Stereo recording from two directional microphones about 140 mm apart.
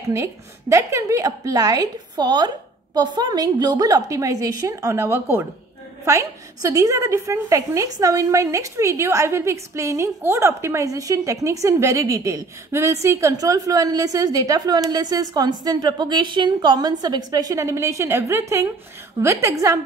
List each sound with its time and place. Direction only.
0.1 s a woman's voice: 20° right (ahead or behind)